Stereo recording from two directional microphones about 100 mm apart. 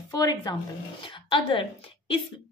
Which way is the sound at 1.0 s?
55° left (ahead or behind).